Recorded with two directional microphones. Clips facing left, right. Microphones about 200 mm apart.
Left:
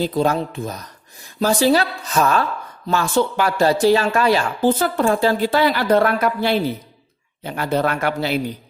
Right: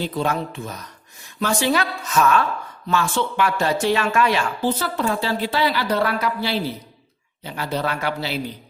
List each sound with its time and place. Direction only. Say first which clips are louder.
0.0 s a woman's voice: left 5 dB; 35° left (ahead or behind)